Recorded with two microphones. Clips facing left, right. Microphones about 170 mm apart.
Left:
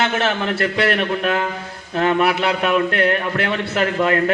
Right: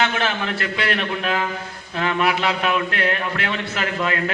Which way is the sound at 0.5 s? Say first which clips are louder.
Left 5 dB; 55° left (ahead or behind).